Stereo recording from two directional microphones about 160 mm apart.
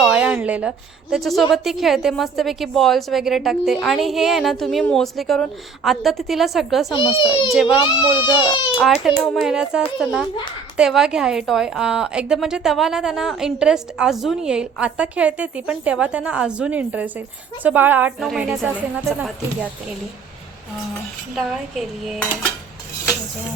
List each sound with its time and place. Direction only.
0.0 s a sound: 5° right (ahead or behind)
1.1 s a woman's voice: centre (ahead or behind)
6.9 s a child's voice: 30° left (ahead or behind)
8.8 s a woman's voice: centre (ahead or behind)
21.3 s a woman's voice: centre (ahead or behind)